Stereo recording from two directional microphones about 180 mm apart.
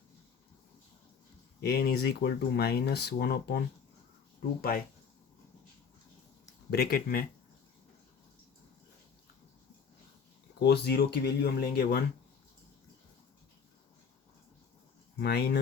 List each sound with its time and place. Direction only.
1.6 s speech: 60° left (ahead or behind)
6.7 s speech: 60° left (ahead or behind)
10.6 s speech: 65° left (ahead or behind)
15.2 s speech: 65° left (ahead or behind)